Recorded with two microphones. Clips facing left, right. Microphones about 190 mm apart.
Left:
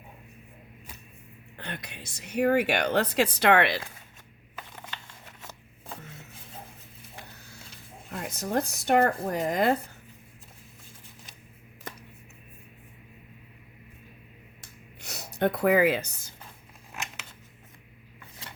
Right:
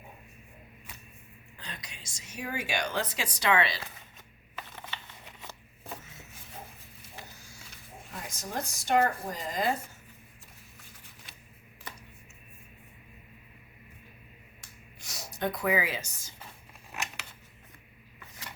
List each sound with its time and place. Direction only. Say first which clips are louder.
1.5 s a woman's voice: left 7 dB; 60° left (ahead or behind)
7.3 s mechanisms: left 3 dB; 60° left (ahead or behind)
8.1 s a woman's voice: left 8 dB; 60° left (ahead or behind)
15.0 s speech: left 6 dB; 60° left (ahead or behind)